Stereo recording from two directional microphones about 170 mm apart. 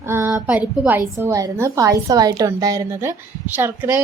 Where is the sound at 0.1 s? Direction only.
15° right (ahead or behind).